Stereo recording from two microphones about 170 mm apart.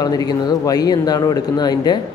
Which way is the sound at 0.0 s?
20° left (ahead or behind).